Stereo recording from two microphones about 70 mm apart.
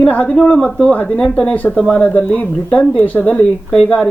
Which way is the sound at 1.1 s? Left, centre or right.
Centre.